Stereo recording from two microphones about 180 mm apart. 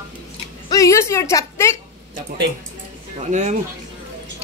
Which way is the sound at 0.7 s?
15° left (ahead or behind).